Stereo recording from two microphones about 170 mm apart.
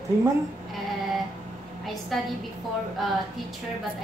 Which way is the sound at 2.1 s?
Centre (ahead or behind).